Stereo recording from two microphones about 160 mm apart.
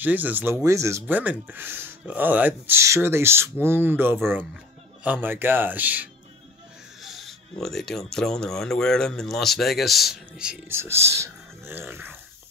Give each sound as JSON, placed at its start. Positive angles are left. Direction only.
{"t": 0.0, "sound": "speech", "side_deg": -10}
{"t": 7.0, "sound": "speech", "side_deg": 0}